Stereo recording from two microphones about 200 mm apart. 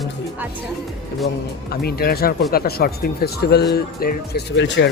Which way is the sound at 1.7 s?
50° left (ahead or behind).